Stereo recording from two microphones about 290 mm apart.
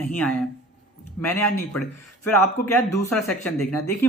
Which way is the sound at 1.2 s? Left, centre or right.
Centre.